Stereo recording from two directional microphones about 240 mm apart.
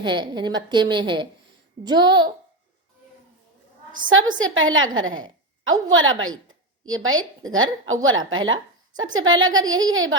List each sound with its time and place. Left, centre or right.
0.0 s a woman's voice: centre
4.4 s a woman's voice: right